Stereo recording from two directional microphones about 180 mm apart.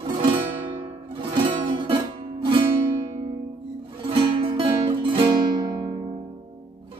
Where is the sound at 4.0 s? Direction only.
30° right (ahead or behind).